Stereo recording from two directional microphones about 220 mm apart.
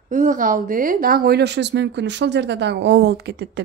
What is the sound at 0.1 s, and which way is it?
A woman's voice, 35° right (ahead or behind).